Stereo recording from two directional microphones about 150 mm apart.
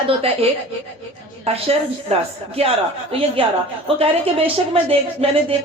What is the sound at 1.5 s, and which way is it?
A woman's voice, 45° right (ahead or behind).